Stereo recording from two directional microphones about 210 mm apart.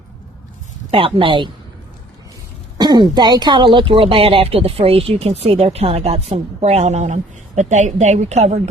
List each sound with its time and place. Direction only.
0.9 s speech: 25° right (ahead or behind)
2.7 s speech: 20° right (ahead or behind)